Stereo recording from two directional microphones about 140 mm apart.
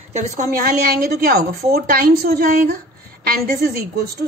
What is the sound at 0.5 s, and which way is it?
A woman's voice, 90° right.